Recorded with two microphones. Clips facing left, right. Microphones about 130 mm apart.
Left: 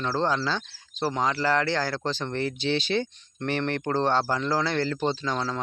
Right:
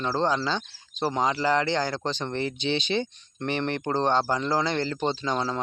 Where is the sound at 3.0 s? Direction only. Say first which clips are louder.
Even; 15° right (ahead or behind).